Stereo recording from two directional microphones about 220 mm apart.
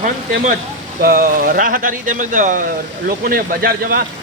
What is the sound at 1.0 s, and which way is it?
Speech, 40° right (ahead or behind).